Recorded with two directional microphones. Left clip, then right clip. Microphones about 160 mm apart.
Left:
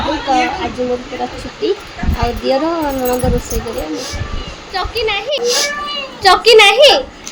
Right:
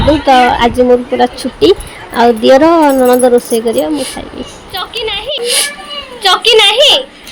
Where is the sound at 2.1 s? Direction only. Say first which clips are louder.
Right 10 dB; 50° right (ahead or behind).